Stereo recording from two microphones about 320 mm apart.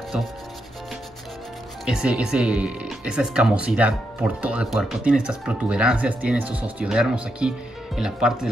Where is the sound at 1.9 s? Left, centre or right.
Centre.